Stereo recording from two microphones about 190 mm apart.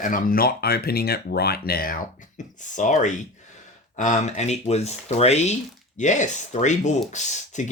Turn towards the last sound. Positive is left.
turn(degrees=40)  # may be behind; listen again after turning